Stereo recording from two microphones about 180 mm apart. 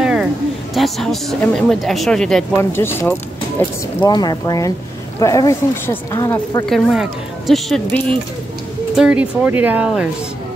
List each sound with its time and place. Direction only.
0.0 s a sound: 5° right (ahead or behind)
0.7 s speech: centre (ahead or behind)
2.5 s speech: 15° left (ahead or behind)
4.0 s speech: 25° left (ahead or behind)
6.6 s speech: centre (ahead or behind)